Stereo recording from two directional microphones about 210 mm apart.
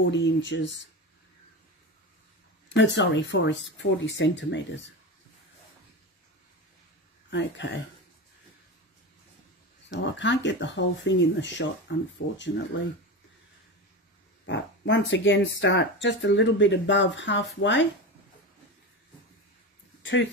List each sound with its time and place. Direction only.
0.1 s speech: 60° left (ahead or behind)
2.7 s speech: 60° left (ahead or behind)
7.2 s speech: 60° left (ahead or behind)
9.8 s speech: 60° left (ahead or behind)
14.4 s speech: 60° left (ahead or behind)